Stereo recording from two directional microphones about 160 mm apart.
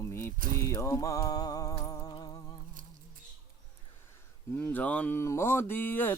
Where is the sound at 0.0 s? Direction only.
15° left (ahead or behind).